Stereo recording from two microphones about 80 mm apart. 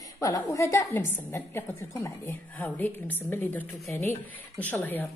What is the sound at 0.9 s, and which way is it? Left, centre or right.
A woman's voice, left.